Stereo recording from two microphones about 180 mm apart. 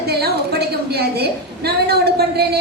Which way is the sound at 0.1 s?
60° right (ahead or behind).